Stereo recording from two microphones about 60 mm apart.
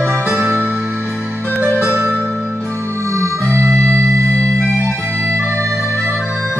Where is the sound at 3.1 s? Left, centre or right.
Right.